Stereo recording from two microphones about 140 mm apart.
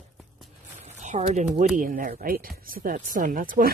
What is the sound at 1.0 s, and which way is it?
Speech, 55° right (ahead or behind).